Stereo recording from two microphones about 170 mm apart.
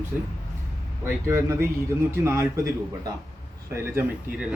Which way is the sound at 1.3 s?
15° right (ahead or behind).